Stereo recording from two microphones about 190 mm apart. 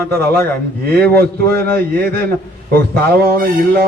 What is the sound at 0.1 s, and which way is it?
Speech, 15° left (ahead or behind).